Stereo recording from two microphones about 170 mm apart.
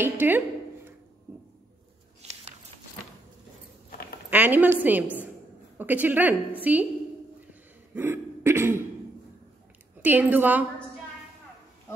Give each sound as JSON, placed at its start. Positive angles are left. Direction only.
{"t": 0.0, "sound": "speech", "side_deg": -10}
{"t": 2.2, "sound": "a sound", "side_deg": -40}
{"t": 4.3, "sound": "a woman's voice", "side_deg": -10}
{"t": 7.9, "sound": "throat clearing", "side_deg": -15}
{"t": 10.0, "sound": "a woman's voice", "side_deg": -10}